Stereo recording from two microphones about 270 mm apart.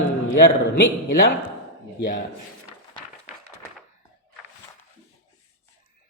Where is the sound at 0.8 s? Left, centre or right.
Left.